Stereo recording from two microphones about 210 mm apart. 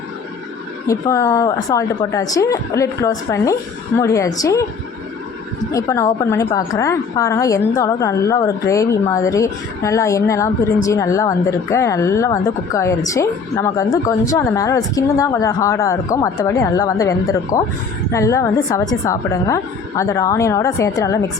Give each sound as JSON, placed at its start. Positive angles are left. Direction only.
{"t": 0.9, "sound": "a woman's voice", "side_deg": 15}
{"t": 5.7, "sound": "a woman's voice", "side_deg": 15}